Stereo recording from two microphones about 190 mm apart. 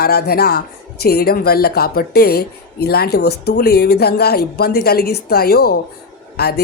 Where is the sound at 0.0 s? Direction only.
55° left (ahead or behind).